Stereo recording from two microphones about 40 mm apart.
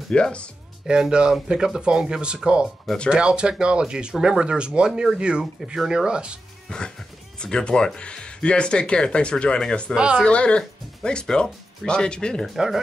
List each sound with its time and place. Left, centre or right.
0.1 s speech: left
1.1 s speech: right
7.3 s speech: left
9.9 s speech: right
10.2 s speech: left
12.5 s speech: centre